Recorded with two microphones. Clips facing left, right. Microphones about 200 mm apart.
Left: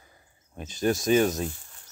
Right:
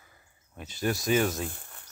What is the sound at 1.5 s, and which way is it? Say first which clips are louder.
Cricket: left 3 dB; 60° right (ahead or behind).